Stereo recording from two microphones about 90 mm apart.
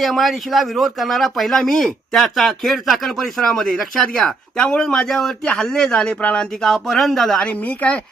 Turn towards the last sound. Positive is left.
turn(degrees=15)  # may be behind; listen again after turning